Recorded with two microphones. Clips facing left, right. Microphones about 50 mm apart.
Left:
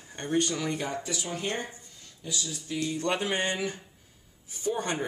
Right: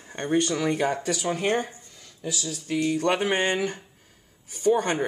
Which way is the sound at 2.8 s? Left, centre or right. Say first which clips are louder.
Right 7 dB; right.